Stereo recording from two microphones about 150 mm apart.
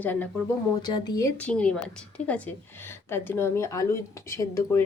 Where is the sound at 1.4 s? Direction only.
10° left (ahead or behind).